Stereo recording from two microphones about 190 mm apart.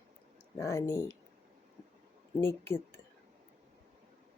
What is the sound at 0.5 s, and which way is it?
Speech, 15° left (ahead or behind).